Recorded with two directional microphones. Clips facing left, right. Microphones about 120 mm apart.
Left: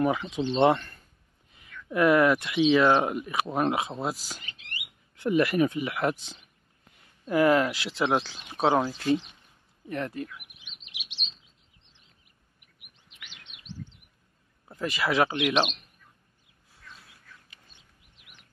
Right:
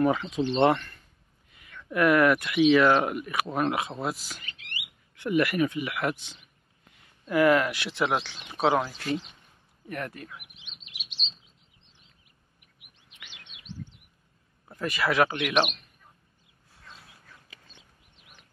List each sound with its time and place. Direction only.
0.0 s speech: 15° left (ahead or behind)
0.7 s a sound: 35° left (ahead or behind)
1.9 s speech: 20° left (ahead or behind)
4.0 s speech: 35° left (ahead or behind)
10.2 s a sound: 25° right (ahead or behind)
14.8 s speech: 25° left (ahead or behind)